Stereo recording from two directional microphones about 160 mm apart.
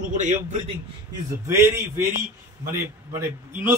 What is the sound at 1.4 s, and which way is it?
Speech, 15° right (ahead or behind).